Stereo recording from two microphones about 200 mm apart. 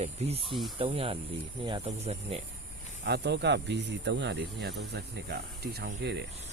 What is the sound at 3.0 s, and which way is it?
Speech, 55° right (ahead or behind).